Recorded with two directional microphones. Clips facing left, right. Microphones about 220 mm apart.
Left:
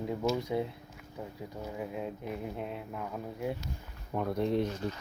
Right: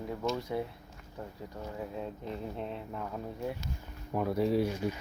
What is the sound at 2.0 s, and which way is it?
Speech, 10° left (ahead or behind).